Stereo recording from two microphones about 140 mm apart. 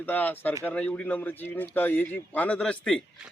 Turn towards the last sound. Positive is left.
turn(degrees=5)  # may be behind; listen again after turning